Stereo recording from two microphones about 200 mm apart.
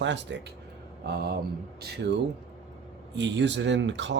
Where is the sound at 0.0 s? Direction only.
65° right (ahead or behind).